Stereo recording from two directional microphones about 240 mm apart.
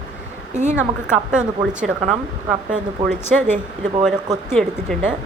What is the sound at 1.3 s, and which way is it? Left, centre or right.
Speech, centre.